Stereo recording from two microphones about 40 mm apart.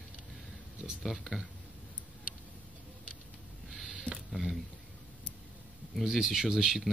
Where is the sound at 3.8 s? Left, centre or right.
Right.